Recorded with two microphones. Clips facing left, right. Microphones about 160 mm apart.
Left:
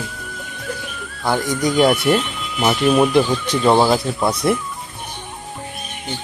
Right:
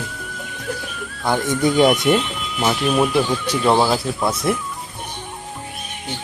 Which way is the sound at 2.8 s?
Centre (ahead or behind).